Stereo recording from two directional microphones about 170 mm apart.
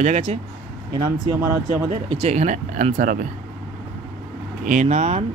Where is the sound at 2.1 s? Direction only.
40° right (ahead or behind).